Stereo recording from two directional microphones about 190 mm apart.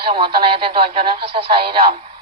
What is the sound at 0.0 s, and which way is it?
Speech, 25° right (ahead or behind).